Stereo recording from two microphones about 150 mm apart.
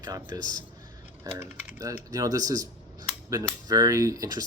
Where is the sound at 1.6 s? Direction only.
20° right (ahead or behind).